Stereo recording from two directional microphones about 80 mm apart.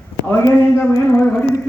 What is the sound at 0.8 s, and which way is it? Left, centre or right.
Speech, left.